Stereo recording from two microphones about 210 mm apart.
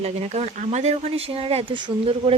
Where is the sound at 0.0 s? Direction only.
30° right (ahead or behind).